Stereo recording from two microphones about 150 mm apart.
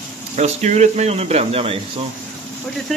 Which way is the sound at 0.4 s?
50° right (ahead or behind).